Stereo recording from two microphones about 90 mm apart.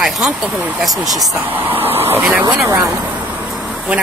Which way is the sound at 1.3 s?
20° right (ahead or behind).